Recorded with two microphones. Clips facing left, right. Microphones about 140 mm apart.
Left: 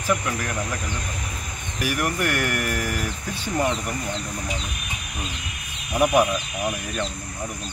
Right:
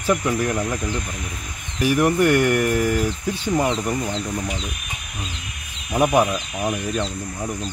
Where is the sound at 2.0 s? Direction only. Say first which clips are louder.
Right 9 dB; 20° right (ahead or behind).